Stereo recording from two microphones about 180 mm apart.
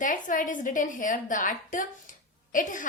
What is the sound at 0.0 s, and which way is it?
A woman's voice, 45° left (ahead or behind).